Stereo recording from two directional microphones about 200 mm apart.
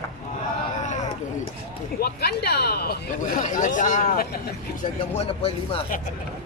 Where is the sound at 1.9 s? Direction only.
50° left (ahead or behind).